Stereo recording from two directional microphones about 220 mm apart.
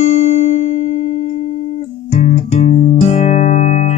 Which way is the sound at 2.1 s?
30° left (ahead or behind).